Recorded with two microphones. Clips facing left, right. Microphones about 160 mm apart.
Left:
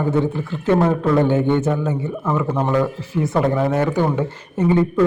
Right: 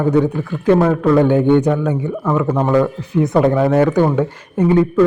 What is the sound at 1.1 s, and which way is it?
Speech, 15° right (ahead or behind).